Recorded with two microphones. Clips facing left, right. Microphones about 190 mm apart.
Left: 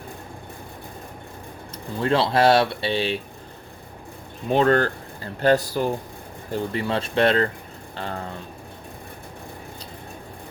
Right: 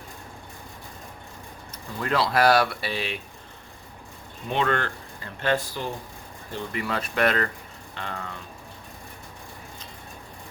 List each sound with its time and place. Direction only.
2.0 s speech: 30° left (ahead or behind)
4.4 s speech: 40° left (ahead or behind)